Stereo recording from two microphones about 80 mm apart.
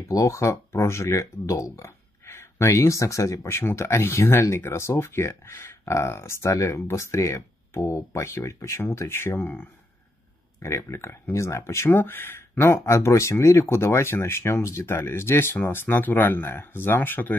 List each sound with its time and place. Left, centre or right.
0.1 s speech: left